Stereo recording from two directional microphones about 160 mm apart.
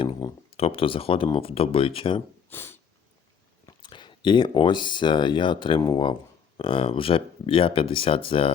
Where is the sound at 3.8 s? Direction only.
30° left (ahead or behind).